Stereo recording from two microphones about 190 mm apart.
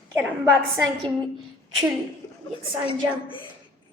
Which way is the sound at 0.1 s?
15° right (ahead or behind).